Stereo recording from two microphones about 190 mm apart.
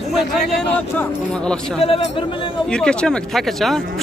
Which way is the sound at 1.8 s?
30° left (ahead or behind).